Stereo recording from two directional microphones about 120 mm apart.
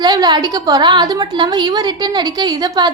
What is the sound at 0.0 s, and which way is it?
A woman's voice, 35° right (ahead or behind).